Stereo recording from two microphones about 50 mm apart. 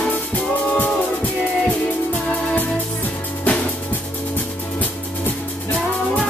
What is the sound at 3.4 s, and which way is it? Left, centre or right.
Music, left.